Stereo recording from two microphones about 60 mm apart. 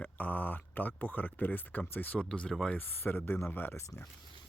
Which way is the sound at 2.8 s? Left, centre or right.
Left.